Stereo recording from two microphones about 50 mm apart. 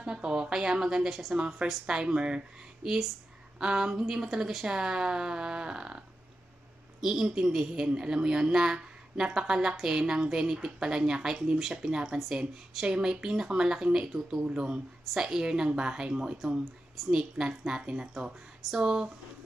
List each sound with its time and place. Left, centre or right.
0.0 s speech: centre
3.5 s a sound: centre
3.9 s speech: centre